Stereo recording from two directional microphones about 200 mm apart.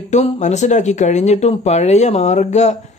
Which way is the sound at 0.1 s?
35° left (ahead or behind).